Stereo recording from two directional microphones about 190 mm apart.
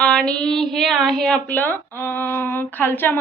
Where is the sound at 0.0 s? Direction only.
5° left (ahead or behind).